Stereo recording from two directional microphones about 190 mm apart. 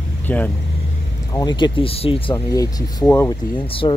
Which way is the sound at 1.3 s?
20° left (ahead or behind).